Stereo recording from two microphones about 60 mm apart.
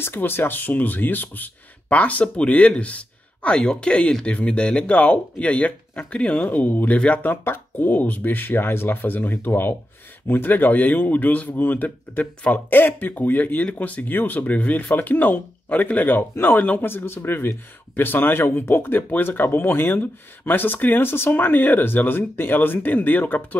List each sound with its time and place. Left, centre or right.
0.0 s speech: left